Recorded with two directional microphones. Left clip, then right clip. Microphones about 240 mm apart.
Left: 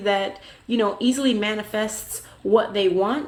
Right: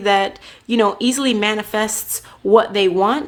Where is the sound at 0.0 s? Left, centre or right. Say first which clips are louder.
Right 6 dB; right.